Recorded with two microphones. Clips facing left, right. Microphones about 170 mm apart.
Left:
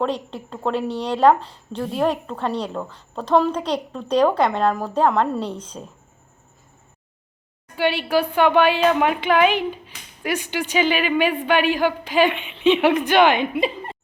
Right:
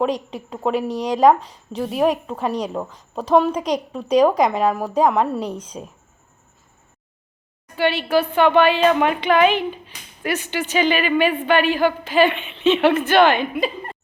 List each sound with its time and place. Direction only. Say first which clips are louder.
0.0 s a woman's voice: right 2 dB; 10° right (ahead or behind)
7.8 s speech: right 1 dB; 10° left (ahead or behind)